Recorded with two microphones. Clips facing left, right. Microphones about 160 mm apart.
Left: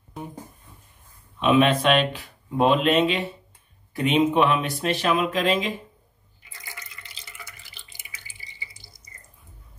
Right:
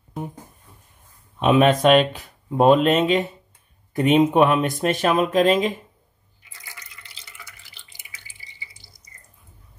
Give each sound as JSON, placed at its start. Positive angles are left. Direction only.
{"t": 1.4, "sound": "speech", "side_deg": -45}